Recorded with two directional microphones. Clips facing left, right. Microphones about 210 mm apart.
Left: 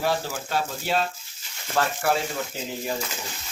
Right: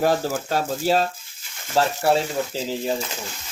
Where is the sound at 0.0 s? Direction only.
45° right (ahead or behind).